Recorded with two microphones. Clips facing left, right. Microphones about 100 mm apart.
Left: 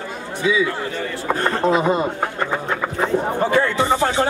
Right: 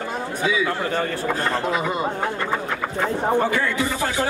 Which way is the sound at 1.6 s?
25° left (ahead or behind).